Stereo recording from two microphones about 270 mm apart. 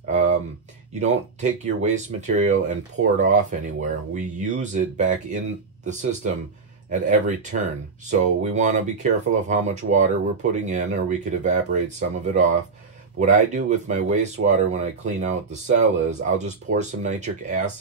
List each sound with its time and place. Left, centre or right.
0.0 s a sound: right
0.9 s speech: right
13.2 s speech: right